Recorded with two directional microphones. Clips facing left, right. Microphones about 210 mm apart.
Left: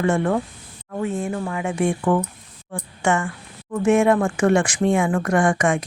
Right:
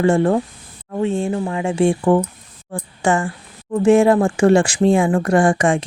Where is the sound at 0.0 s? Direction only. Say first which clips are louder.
Right 5 dB; 30° right (ahead or behind).